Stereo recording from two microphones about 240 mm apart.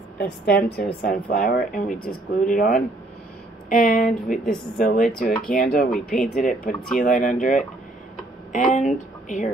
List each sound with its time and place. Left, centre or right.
0.2 s a woman's voice: left